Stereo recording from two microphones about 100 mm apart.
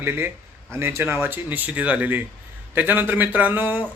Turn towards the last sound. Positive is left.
turn(degrees=-20)  # may be behind; listen again after turning